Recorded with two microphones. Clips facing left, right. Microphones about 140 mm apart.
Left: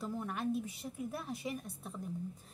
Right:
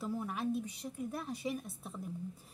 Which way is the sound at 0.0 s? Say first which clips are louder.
Right 1 dB; 5° right (ahead or behind).